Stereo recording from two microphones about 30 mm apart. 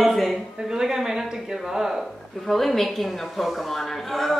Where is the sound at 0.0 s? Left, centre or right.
Centre.